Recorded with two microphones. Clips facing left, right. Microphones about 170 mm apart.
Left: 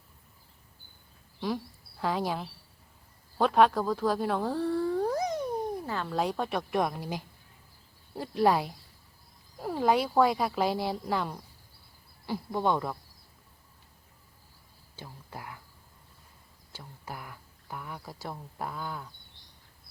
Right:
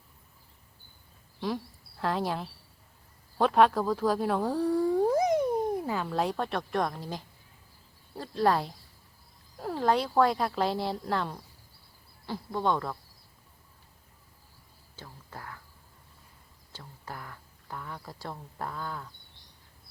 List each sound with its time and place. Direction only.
1.4 s speech: centre (ahead or behind)
14.9 s speech: 15° left (ahead or behind)
16.7 s speech: 10° left (ahead or behind)